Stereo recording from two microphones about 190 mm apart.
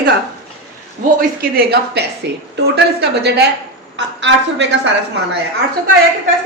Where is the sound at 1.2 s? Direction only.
50° right (ahead or behind); by 4.8 s 70° right (ahead or behind).